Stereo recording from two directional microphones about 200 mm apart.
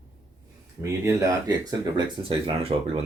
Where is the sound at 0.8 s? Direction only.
15° right (ahead or behind).